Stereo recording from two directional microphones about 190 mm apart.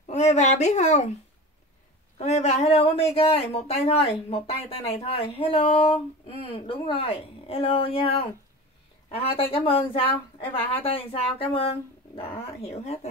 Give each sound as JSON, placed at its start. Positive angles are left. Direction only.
{"t": 0.0, "sound": "speech", "side_deg": 35}
{"t": 2.1, "sound": "speech", "side_deg": 35}